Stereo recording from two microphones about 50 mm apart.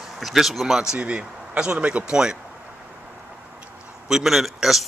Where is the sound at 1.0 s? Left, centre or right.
Right.